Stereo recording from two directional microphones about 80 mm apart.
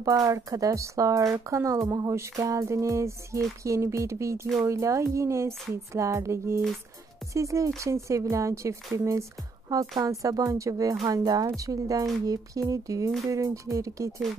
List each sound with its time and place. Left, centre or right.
0.0 s speech: right
1.9 s music: right
9.7 s speech: right
13.3 s music: right